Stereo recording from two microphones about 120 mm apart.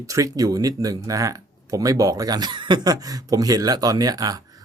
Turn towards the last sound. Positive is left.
turn(degrees=-30)  # may be behind; listen again after turning